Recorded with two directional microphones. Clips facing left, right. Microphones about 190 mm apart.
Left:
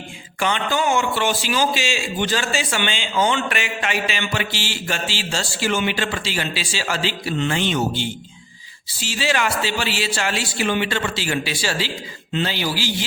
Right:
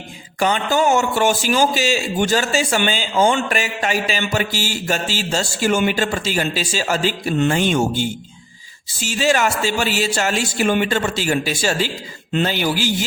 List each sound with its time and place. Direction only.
0.3 s a man's voice: 40° right (ahead or behind)